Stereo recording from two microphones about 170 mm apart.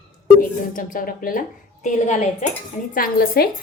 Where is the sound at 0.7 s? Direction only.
55° left (ahead or behind).